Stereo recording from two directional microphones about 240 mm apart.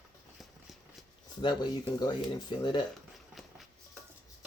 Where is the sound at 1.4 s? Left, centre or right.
Centre.